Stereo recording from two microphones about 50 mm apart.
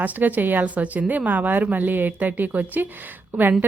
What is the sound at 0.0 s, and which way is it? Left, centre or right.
A woman's voice, right.